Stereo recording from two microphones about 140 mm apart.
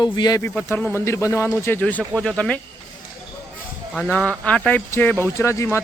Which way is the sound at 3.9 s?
5° left (ahead or behind).